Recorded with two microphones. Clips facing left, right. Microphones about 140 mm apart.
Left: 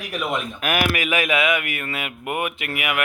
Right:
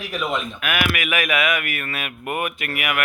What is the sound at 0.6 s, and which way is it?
Speech, 40° left (ahead or behind).